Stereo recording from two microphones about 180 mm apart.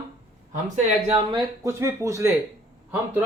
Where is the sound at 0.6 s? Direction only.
40° right (ahead or behind).